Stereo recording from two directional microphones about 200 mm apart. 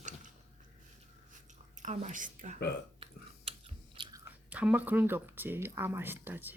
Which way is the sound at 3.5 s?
30° right (ahead or behind).